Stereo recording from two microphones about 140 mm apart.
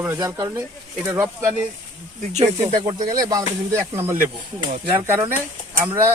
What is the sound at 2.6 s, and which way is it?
Speech, 25° right (ahead or behind).